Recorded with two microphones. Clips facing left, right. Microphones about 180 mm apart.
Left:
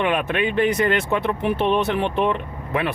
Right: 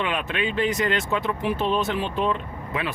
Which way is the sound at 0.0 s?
55° left (ahead or behind).